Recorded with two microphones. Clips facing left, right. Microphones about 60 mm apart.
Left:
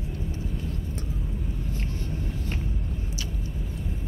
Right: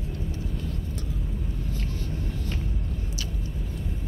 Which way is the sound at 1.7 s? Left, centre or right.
Left.